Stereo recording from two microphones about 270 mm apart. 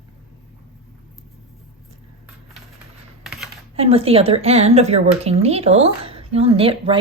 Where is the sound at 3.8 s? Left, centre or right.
Right.